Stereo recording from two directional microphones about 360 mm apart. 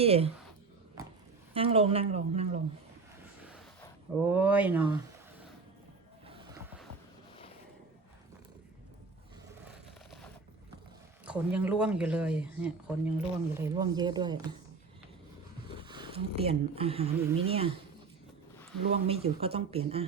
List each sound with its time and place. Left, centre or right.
0.0 s speech: centre
1.5 s speech: centre
4.2 s speech: centre
6.2 s a sound: centre
11.3 s speech: centre
15.8 s speech: centre
19.0 s speech: centre